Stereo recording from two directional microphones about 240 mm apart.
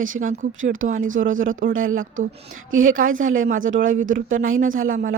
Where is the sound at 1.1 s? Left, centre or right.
Right.